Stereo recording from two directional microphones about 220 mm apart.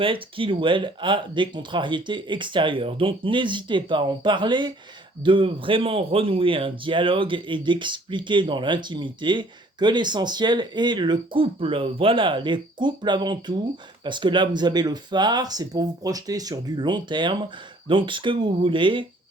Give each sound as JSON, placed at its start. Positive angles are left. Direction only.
{"t": 0.0, "sound": "speech", "side_deg": -25}